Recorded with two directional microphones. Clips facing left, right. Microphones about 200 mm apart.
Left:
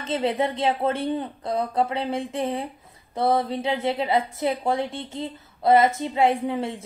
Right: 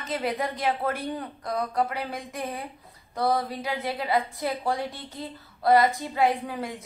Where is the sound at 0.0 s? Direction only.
30° left (ahead or behind).